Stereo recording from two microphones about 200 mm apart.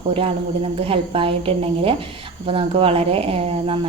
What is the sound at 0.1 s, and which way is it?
Speech, 30° right (ahead or behind).